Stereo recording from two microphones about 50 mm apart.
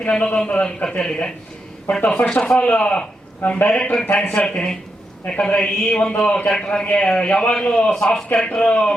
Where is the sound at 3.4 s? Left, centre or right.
Left.